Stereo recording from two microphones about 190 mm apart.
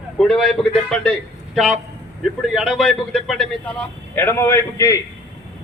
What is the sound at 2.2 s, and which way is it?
A man's voice, centre (ahead or behind).